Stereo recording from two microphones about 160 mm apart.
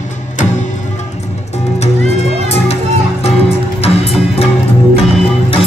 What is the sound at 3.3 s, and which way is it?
Music, 40° left (ahead or behind).